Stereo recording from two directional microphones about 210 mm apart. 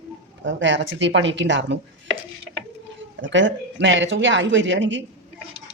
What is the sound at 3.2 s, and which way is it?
Speech, 60° right (ahead or behind).